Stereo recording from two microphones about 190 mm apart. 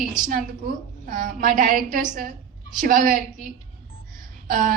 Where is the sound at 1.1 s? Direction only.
45° right (ahead or behind).